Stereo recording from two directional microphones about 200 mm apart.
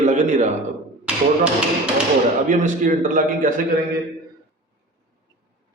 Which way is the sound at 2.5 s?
40° right (ahead or behind).